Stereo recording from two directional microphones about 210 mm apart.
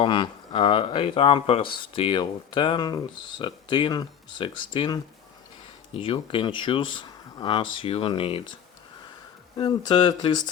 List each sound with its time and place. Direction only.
0.0 s speech: 25° left (ahead or behind)
9.6 s speech: 20° left (ahead or behind)